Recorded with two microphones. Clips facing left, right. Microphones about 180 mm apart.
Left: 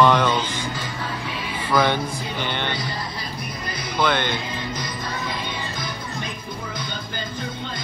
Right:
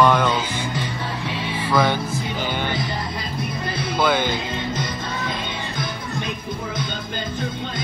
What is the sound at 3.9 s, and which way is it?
Speech, 5° right (ahead or behind).